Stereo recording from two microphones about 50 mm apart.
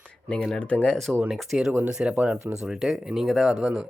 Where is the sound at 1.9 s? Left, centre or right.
Centre.